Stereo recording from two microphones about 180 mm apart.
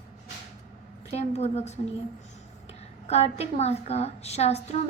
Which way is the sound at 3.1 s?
35° left (ahead or behind).